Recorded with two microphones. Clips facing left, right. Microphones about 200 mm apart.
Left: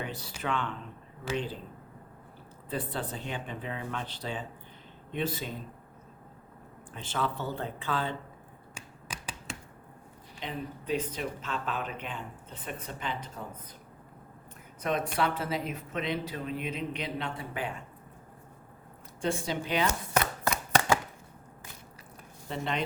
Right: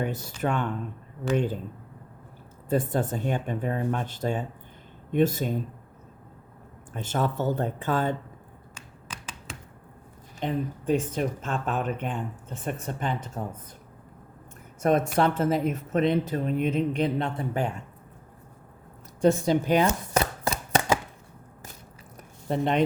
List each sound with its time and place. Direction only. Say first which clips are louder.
0.0 s speech: right 8 dB; 45° right (ahead or behind)
2.6 s speech: right 9 dB; 45° right (ahead or behind)
6.9 s speech: right 5 dB; 45° right (ahead or behind)
10.4 s speech: right 9 dB; 50° right (ahead or behind)
14.8 s speech: right 7 dB; 45° right (ahead or behind)
19.2 s speech: right 10 dB; 45° right (ahead or behind)
19.9 s chopping: right 4 dB; 25° right (ahead or behind)
22.4 s speech: right 8 dB; 50° right (ahead or behind)